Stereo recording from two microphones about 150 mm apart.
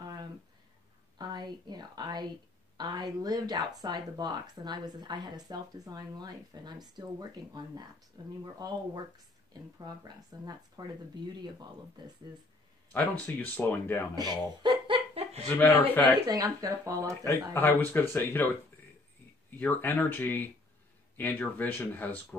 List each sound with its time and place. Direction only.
0.0 s a sound: 25° right (ahead or behind)
1.1 s speech: 30° right (ahead or behind)
12.9 s speech: 10° left (ahead or behind)
14.1 s chuckle: 25° right (ahead or behind)
15.6 s speech: 10° left (ahead or behind)
16.3 s speech: 25° right (ahead or behind)
17.2 s speech: 15° left (ahead or behind)
19.6 s speech: 10° left (ahead or behind)